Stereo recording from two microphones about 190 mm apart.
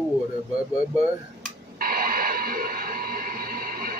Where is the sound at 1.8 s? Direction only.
50° right (ahead or behind).